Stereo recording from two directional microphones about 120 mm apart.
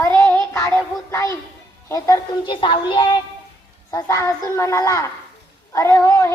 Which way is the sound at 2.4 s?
45° left (ahead or behind).